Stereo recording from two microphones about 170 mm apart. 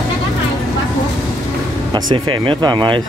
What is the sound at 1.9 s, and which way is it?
Speech, 25° right (ahead or behind).